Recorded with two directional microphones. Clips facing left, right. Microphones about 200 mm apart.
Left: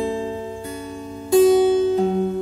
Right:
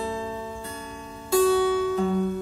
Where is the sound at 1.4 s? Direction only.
25° left (ahead or behind).